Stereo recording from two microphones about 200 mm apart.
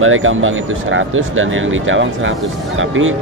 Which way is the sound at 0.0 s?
90° right.